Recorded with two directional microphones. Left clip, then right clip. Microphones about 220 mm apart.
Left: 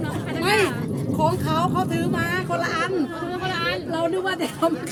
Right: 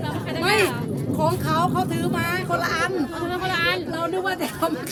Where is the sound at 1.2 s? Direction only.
20° right (ahead or behind).